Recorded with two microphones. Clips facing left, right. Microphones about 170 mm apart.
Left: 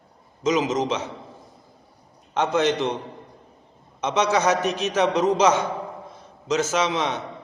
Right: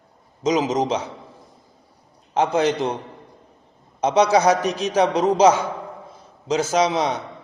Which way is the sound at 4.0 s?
35° right (ahead or behind).